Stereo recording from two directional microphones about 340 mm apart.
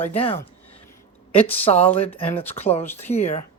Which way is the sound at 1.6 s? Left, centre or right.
Centre.